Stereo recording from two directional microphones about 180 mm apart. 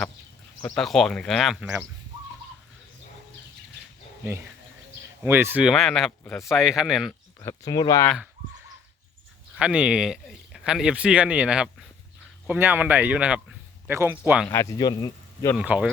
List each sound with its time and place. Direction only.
0.8 s speech: centre (ahead or behind)
5.2 s speech: 10° right (ahead or behind)
7.3 s speech: 20° left (ahead or behind)
9.6 s speech: 5° right (ahead or behind)
14.5 s speech: 20° left (ahead or behind)
15.5 s speech: 5° right (ahead or behind)